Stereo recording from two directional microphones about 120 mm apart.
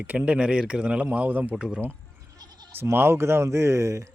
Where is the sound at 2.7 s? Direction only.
20° right (ahead or behind).